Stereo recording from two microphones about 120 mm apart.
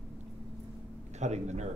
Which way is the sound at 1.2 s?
70° right (ahead or behind).